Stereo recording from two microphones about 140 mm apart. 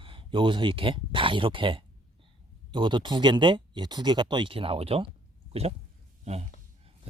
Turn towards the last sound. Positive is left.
turn(degrees=-50)  # may be behind; listen again after turning